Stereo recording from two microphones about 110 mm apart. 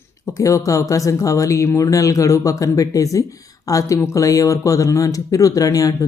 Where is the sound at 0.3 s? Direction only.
30° left (ahead or behind).